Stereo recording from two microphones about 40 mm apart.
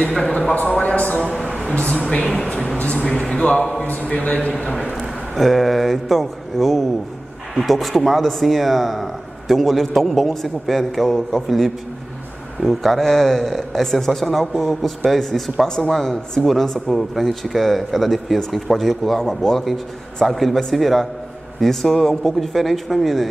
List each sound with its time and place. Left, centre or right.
0.5 s a man's voice: left
2.2 s speech: centre
2.8 s a man's voice: left
4.5 s speech: left
4.9 s speech: centre
19.1 s speech: centre